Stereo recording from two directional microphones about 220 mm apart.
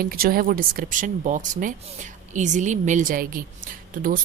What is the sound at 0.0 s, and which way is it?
A woman's voice, 40° right (ahead or behind).